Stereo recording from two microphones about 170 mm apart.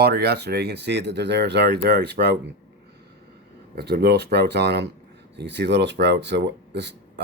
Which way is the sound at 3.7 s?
70° right (ahead or behind).